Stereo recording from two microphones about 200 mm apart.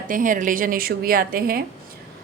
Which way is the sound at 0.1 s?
40° right (ahead or behind).